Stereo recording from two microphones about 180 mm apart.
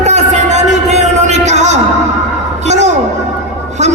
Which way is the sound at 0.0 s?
40° right (ahead or behind).